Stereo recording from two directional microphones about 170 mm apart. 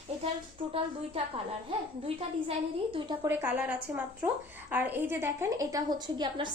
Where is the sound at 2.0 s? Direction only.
30° right (ahead or behind).